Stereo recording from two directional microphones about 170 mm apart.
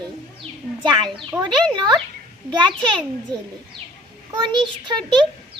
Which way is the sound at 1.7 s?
25° right (ahead or behind).